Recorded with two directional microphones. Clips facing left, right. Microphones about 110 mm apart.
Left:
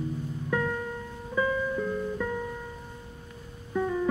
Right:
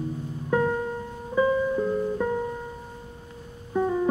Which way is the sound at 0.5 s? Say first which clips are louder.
Right 6 dB; 30° right (ahead or behind).